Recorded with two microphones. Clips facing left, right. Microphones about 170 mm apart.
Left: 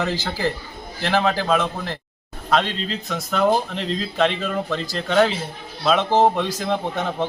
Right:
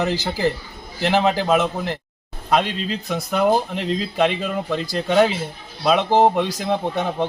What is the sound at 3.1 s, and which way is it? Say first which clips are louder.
A man's voice: right 1 dB; 15° right (ahead or behind).